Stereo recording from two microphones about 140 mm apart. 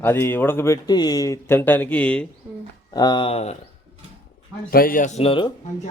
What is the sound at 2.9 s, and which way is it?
Speech, 30° left (ahead or behind).